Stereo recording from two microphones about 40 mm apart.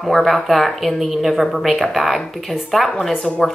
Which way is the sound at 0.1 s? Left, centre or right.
Centre.